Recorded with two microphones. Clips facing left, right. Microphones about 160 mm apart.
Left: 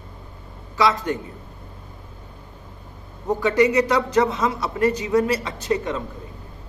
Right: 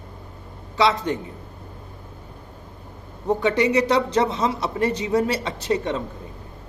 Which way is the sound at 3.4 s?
25° right (ahead or behind).